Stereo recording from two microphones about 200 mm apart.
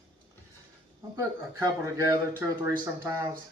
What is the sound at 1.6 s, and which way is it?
Speech, 15° right (ahead or behind).